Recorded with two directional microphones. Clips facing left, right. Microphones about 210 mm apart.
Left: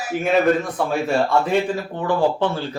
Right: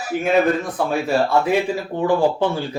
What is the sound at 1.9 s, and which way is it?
Speech, 15° right (ahead or behind).